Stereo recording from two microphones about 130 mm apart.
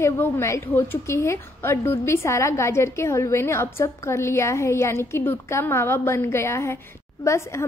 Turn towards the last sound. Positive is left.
turn(degrees=20)  # may be behind; listen again after turning